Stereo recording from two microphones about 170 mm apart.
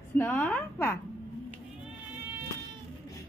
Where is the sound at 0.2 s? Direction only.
10° left (ahead or behind).